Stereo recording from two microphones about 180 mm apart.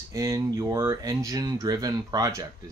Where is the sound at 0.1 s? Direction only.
20° right (ahead or behind).